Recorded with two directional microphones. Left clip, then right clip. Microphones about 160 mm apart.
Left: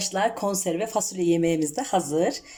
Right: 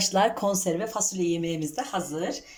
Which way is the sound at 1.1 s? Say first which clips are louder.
Left 5 dB; 40° left (ahead or behind).